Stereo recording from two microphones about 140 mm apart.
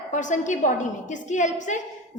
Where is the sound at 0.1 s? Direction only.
60° left (ahead or behind).